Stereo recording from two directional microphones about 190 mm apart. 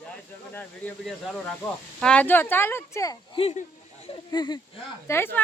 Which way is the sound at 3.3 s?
35° left (ahead or behind).